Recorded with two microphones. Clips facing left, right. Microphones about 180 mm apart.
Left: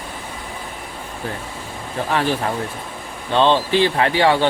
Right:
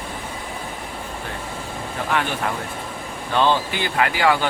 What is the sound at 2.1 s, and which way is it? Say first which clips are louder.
Speech: left 3 dB; 30° left (ahead or behind).